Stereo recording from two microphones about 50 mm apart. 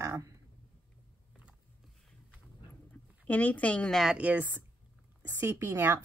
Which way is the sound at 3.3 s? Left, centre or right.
Left.